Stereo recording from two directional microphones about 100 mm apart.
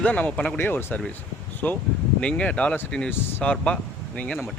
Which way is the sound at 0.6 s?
20° left (ahead or behind).